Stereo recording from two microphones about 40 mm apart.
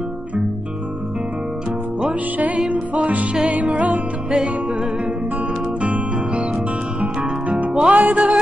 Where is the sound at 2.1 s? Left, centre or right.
Right.